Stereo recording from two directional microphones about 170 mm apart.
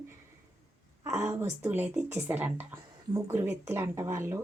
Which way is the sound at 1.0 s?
15° right (ahead or behind).